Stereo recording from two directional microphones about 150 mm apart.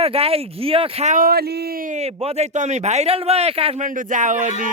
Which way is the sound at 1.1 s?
80° right.